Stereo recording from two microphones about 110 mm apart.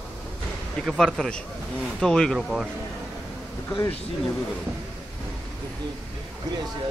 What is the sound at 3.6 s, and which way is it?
Speech, 30° left (ahead or behind).